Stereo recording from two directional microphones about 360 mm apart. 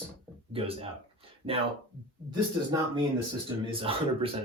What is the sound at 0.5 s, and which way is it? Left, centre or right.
Speech, centre.